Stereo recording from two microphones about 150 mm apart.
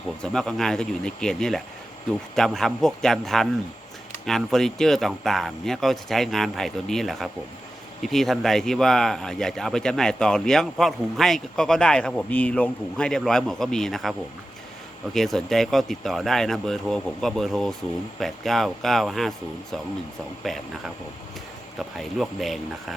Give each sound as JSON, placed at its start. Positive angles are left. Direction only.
{"t": 0.2, "sound": "speech", "side_deg": 5}
{"t": 20.4, "sound": "speech", "side_deg": 0}